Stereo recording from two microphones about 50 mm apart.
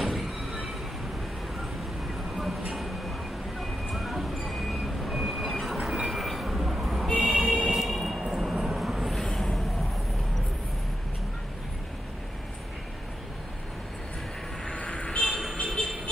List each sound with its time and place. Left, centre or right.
0.0 s train: centre
2.3 s vehicle: centre
2.7 s train: centre
3.6 s vehicle: centre
7.2 s a sound: centre
7.7 s vehicle: centre
14.6 s vehicle: centre
15.5 s music: centre